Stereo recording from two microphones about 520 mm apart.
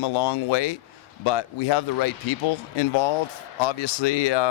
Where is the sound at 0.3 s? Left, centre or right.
Left.